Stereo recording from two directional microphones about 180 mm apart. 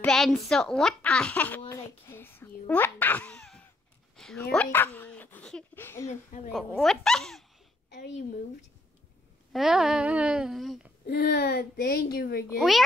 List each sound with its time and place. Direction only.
0.0 s a child's voice: 5° left (ahead or behind)
6.0 s a woman's voice: 45° left (ahead or behind)
6.8 s speech: centre (ahead or behind)
7.9 s a woman's voice: 70° left (ahead or behind)
9.5 s speech: centre (ahead or behind)
11.1 s speech: 60° left (ahead or behind)
12.5 s speech: centre (ahead or behind)